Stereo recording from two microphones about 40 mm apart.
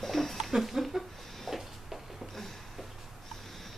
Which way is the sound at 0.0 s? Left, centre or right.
Centre.